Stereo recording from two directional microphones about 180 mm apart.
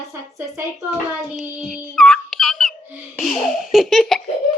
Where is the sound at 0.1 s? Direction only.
15° right (ahead or behind).